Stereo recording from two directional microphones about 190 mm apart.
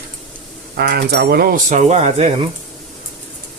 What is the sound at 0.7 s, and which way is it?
Speech, 60° right (ahead or behind).